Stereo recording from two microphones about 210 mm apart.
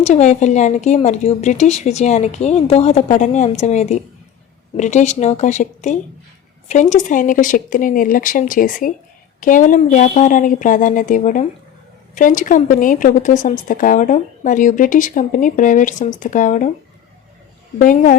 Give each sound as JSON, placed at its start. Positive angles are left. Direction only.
{"t": 0.0, "sound": "a woman's voice", "side_deg": 35}
{"t": 17.7, "sound": "a woman's voice", "side_deg": 40}